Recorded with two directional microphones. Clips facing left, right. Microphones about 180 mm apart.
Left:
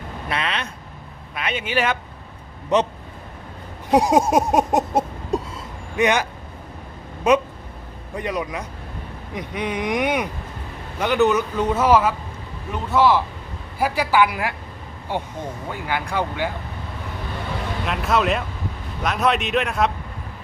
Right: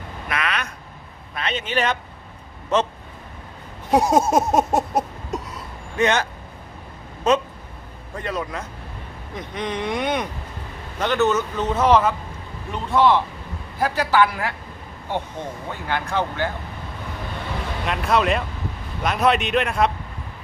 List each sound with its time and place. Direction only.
0.3 s speech: 30° left (ahead or behind)
1.4 s speech: 10° left (ahead or behind)
3.9 s speech: 15° left (ahead or behind)
5.3 s vehicle: 30° left (ahead or behind)
6.0 s speech: 15° left (ahead or behind)
7.3 s a man's voice: 15° left (ahead or behind)
17.8 s a man's voice: centre (ahead or behind)